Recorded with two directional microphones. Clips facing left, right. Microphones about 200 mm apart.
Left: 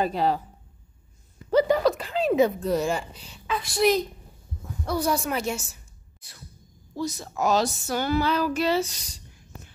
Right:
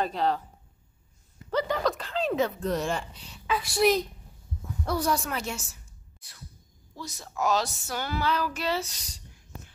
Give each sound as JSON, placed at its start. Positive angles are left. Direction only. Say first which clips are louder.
{"t": 0.0, "sound": "child singing", "louder": "left 3 dB", "side_deg": 5}
{"t": 1.5, "sound": "a woman's voice", "louder": "left 7 dB", "side_deg": 10}
{"t": 7.0, "sound": "speech", "louder": "left 5 dB", "side_deg": 25}
{"t": 8.2, "sound": "child singing", "louder": "left 5 dB", "side_deg": 5}